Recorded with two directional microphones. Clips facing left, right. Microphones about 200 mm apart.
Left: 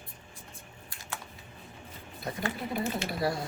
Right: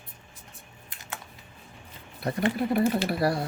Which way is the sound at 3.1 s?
65° right (ahead or behind).